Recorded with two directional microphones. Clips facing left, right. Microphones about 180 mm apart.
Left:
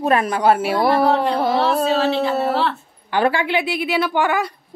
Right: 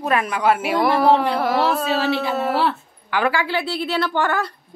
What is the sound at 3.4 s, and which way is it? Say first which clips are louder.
A woman's voice: left 2 dB; 15° left (ahead or behind).